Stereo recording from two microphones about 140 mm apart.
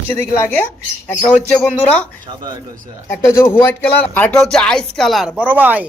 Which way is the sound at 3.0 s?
20° left (ahead or behind).